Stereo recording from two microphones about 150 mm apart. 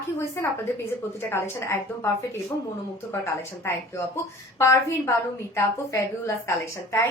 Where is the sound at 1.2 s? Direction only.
15° left (ahead or behind).